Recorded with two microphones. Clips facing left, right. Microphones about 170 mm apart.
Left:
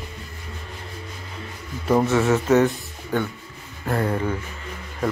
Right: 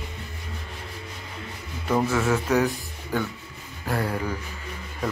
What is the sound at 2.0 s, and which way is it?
Speech, 25° left (ahead or behind).